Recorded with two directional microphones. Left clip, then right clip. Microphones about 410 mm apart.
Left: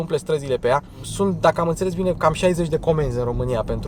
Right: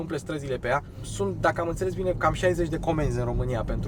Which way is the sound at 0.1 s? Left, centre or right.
Left.